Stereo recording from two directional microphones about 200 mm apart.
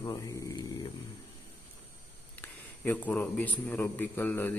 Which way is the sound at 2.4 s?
10° left (ahead or behind).